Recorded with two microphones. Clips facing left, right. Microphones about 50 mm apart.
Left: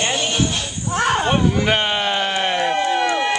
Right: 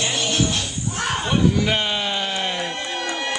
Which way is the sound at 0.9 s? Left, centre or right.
Left.